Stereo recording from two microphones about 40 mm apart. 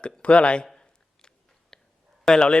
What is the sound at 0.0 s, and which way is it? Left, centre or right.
Speech, left.